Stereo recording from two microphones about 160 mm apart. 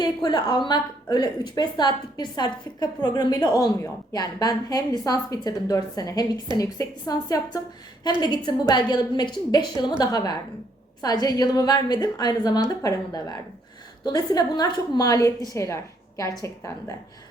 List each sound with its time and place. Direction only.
0.0 s a woman's voice: 25° left (ahead or behind)